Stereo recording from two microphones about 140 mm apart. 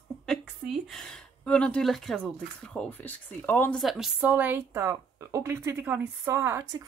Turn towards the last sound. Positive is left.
turn(degrees=-20)  # may be behind; listen again after turning